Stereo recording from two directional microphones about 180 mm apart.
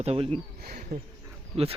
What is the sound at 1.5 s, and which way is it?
Speech, 35° right (ahead or behind).